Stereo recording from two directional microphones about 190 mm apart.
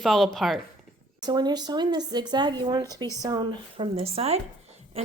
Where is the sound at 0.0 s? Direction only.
Centre (ahead or behind).